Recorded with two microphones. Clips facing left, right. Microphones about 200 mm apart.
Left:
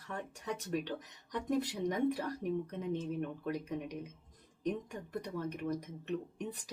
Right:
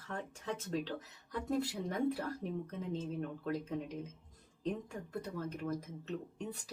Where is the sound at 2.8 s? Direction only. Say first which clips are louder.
Left 2 dB; 15° left (ahead or behind).